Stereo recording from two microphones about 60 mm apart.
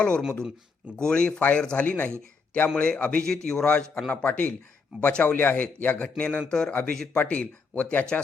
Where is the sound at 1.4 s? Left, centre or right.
Left.